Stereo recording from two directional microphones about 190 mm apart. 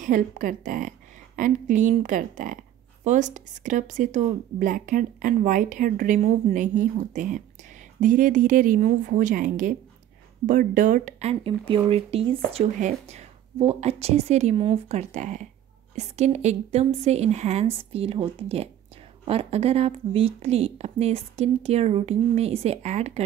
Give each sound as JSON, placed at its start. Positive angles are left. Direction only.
{"t": 0.0, "sound": "a woman's voice", "side_deg": -45}